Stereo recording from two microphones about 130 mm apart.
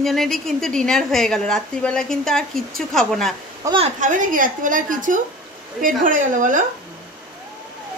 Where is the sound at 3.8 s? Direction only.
85° right.